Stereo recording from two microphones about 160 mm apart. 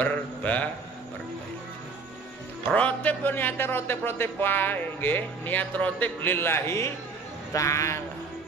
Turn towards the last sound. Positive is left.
turn(degrees=20)  # may be behind; listen again after turning